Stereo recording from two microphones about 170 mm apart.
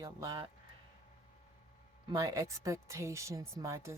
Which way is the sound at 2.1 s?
20° right (ahead or behind).